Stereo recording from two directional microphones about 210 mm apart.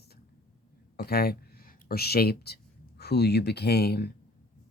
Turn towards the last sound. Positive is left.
turn(degrees=50)  # may be behind; listen again after turning